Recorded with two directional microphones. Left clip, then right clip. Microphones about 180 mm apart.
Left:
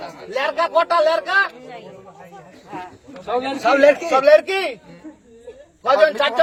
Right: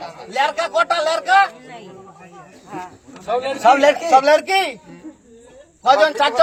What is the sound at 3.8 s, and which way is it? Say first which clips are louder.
Speech: right 1 dB; 5° left (ahead or behind).